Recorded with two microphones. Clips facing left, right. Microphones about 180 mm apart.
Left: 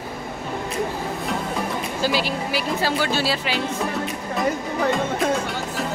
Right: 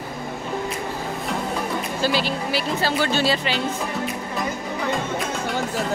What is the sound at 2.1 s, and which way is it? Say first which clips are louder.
Speech: even; 10° left (ahead or behind).